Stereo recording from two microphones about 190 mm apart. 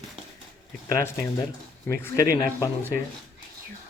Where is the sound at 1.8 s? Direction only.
15° left (ahead or behind).